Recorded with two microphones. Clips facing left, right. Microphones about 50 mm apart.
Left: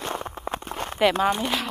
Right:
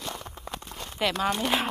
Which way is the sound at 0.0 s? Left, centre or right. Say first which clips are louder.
Left 7 dB; left.